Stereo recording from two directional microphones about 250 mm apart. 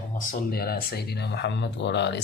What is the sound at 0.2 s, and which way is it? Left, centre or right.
Speech, left.